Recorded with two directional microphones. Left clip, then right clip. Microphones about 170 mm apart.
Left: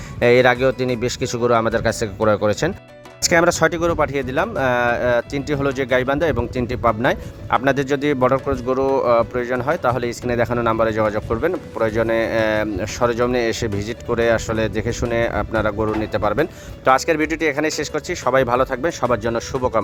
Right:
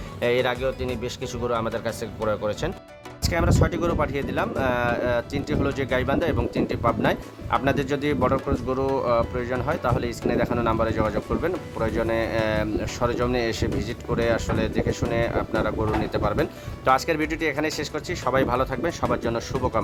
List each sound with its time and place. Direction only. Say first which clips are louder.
0.2 s speech: left 9 dB; 45° left (ahead or behind)